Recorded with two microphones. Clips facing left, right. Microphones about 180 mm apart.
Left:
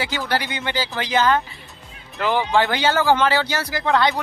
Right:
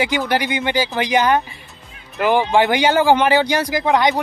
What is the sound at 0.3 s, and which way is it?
Speech, 15° right (ahead or behind).